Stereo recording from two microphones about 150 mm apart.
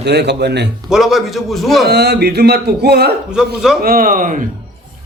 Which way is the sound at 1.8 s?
90° right.